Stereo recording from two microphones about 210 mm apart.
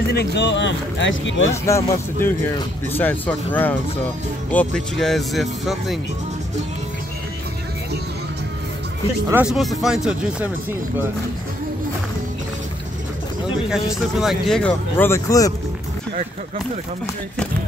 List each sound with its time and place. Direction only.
0.1 s speech: 50° left (ahead or behind)
1.5 s speech: 15° left (ahead or behind)
9.3 s speech: 5° right (ahead or behind)
13.7 s speech: centre (ahead or behind); by 15.5 s 15° left (ahead or behind)